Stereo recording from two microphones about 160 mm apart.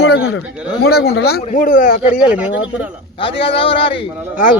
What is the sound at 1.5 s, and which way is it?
Speech, 55° left (ahead or behind).